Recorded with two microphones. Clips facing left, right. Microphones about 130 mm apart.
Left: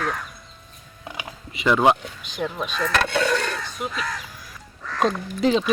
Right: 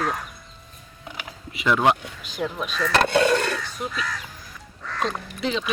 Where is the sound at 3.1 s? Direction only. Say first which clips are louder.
Right 4 dB; 40° right (ahead or behind).